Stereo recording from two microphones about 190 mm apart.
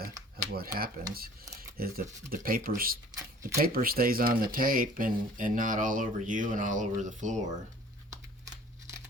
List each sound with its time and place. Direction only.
0.5 s speech: 50° right (ahead or behind)
3.2 s a sound: 15° right (ahead or behind)
3.6 s speech: 50° right (ahead or behind)